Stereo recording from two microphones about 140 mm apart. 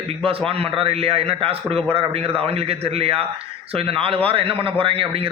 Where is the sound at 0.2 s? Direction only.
40° right (ahead or behind).